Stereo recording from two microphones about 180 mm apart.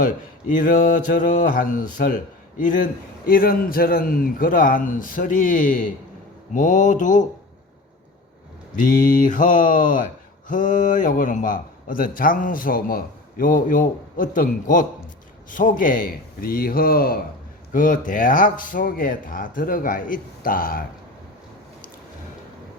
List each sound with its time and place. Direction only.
0.0 s a man's voice: 45° left (ahead or behind)
8.8 s a man's voice: 50° left (ahead or behind)